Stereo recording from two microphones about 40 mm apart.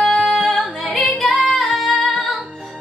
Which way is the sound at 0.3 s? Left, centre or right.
Centre.